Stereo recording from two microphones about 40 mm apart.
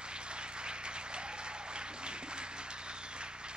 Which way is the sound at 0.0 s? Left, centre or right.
Right.